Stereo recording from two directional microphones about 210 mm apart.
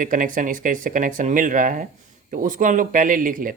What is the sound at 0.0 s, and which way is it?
Speech, 40° right (ahead or behind).